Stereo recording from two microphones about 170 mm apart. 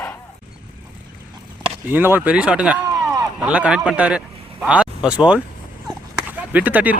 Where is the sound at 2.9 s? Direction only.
20° right (ahead or behind).